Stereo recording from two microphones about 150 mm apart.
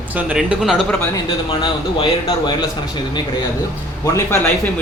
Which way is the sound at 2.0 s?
35° left (ahead or behind).